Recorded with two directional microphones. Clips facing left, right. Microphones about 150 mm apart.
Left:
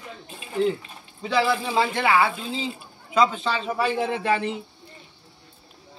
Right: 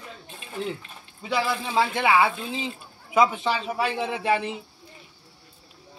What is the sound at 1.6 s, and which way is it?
Speech, centre (ahead or behind).